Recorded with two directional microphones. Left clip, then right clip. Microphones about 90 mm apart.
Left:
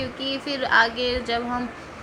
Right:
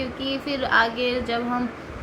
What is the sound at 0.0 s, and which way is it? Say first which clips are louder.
A woman's voice: even; 15° left (ahead or behind).